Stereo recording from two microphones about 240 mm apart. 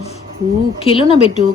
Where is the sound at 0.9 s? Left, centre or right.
Left.